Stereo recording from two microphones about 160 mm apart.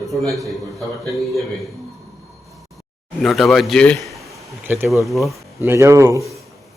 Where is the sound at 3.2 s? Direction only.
Centre (ahead or behind).